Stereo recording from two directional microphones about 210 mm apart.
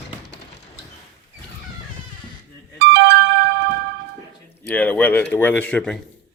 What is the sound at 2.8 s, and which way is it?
Music, 55° right (ahead or behind).